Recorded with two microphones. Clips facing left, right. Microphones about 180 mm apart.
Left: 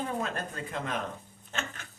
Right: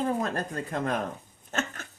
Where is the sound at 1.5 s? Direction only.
45° right (ahead or behind).